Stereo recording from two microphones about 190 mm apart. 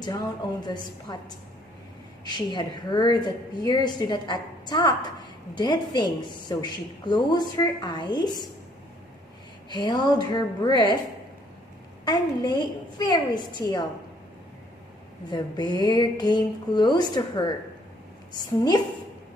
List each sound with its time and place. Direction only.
0.0 s a woman's voice: 20° left (ahead or behind)
9.7 s a woman's voice: 25° left (ahead or behind)
12.0 s a woman's voice: 20° left (ahead or behind)
15.2 s a woman's voice: 20° left (ahead or behind)